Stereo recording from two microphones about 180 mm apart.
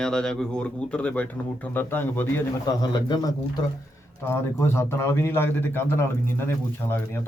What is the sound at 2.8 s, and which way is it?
A man's voice, 25° left (ahead or behind).